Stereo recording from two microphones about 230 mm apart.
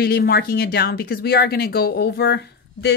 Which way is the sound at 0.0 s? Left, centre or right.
Left.